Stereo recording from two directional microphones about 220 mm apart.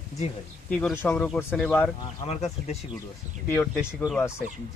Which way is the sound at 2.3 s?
30° left (ahead or behind).